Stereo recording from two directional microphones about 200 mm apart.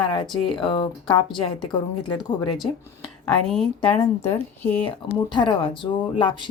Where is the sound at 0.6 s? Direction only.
25° left (ahead or behind).